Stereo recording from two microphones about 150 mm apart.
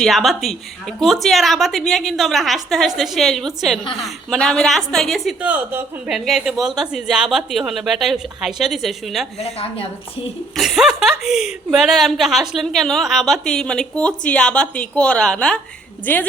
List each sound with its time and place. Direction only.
0.0 s a woman's voice: centre (ahead or behind)
5.4 s a woman's voice: 10° right (ahead or behind)
9.4 s a woman's voice: 45° left (ahead or behind)
10.6 s a woman's voice: 5° right (ahead or behind)